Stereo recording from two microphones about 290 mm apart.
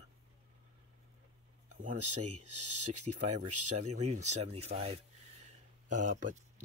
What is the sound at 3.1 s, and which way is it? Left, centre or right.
Speech, right.